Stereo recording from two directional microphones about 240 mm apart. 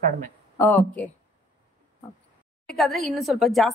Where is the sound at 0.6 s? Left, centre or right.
Centre.